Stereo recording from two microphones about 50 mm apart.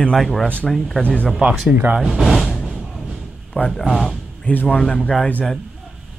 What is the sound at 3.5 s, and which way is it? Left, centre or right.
A man's voice, left.